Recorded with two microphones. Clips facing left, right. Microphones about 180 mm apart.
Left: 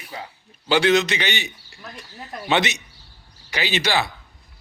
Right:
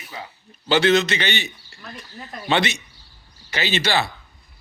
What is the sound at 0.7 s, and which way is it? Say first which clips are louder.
A man's voice: even; 15° left (ahead or behind).